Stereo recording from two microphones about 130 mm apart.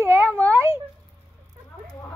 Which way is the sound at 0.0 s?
20° right (ahead or behind).